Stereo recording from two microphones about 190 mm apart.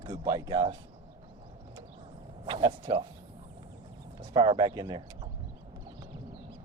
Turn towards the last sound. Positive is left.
turn(degrees=-25)  # may be behind; listen again after turning